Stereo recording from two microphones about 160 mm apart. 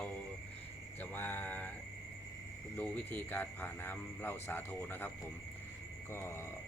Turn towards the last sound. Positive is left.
turn(degrees=15)  # may be behind; listen again after turning